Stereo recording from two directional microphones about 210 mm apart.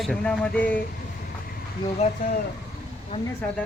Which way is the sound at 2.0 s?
30° left (ahead or behind).